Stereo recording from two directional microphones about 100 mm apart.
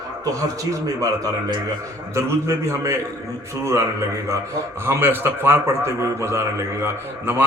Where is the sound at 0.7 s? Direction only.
35° right (ahead or behind).